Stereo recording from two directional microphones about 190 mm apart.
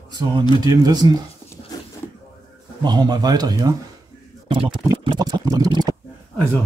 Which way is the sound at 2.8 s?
20° right (ahead or behind).